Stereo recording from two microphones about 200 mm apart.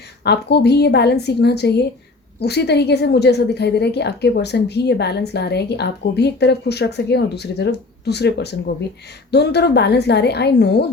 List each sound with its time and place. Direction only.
0.3 s a woman's voice: 55° left (ahead or behind)